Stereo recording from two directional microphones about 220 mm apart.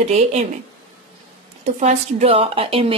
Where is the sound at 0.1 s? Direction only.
30° right (ahead or behind).